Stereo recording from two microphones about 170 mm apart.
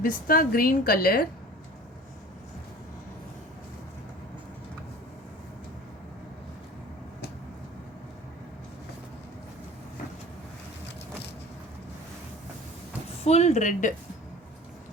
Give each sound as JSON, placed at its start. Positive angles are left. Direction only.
{"t": 0.0, "sound": "a woman's voice", "side_deg": 55}
{"t": 13.1, "sound": "speech", "side_deg": 40}